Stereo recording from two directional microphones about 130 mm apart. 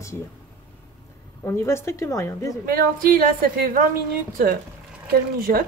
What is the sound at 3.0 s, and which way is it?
Speech, 90° right.